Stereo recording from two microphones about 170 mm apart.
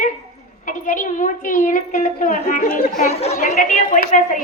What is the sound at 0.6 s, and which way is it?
A woman's voice, 50° left (ahead or behind).